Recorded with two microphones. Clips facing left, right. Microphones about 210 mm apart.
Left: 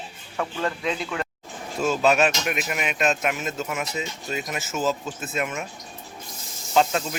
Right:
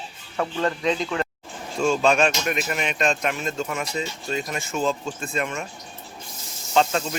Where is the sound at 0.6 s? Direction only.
5° left (ahead or behind).